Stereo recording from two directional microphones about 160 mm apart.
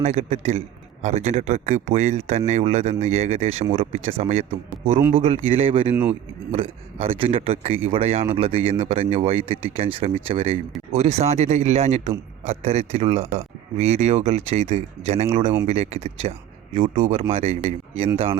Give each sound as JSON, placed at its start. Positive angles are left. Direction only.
{"t": 0.0, "sound": "a man's voice", "side_deg": -45}
{"t": 5.9, "sound": "speech", "side_deg": -10}
{"t": 6.5, "sound": "a man's voice", "side_deg": -35}